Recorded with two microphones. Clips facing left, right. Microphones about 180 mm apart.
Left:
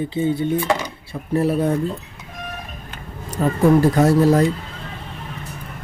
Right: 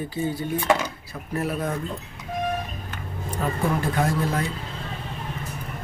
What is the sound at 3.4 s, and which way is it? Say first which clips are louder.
Speech: left 10 dB; 40° left (ahead or behind).